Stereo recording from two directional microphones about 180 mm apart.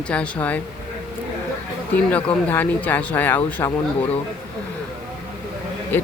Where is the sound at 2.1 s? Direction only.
5° left (ahead or behind).